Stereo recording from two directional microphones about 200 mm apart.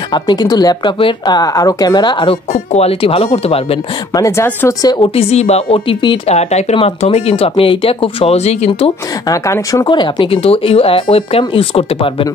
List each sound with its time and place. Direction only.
0.1 s speech: 20° left (ahead or behind)
4.1 s speech: 15° left (ahead or behind); by 8.9 s 30° left (ahead or behind)
9.3 s speech: 15° left (ahead or behind)